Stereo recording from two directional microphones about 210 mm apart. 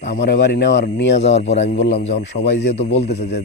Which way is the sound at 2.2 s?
55° left (ahead or behind).